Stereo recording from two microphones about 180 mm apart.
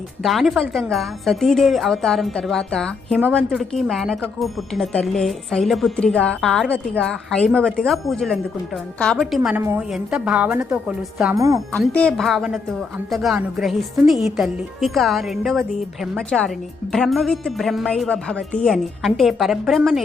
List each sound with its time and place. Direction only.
0.2 s a woman's voice: centre (ahead or behind)
11.3 s speech: 20° right (ahead or behind)
11.7 s speech: 5° left (ahead or behind)